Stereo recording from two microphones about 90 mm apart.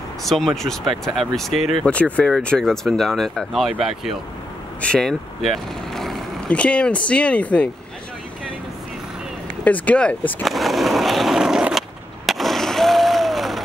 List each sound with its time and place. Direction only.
0.2 s speech: centre (ahead or behind)
1.9 s speech: 15° left (ahead or behind); by 4.2 s 5° right (ahead or behind)
4.8 s speech: 10° left (ahead or behind)
5.4 s vehicle: centre (ahead or behind)
6.5 s speech: 15° left (ahead or behind)
9.7 s speech: 15° left (ahead or behind)
10.4 s skateboard: centre (ahead or behind)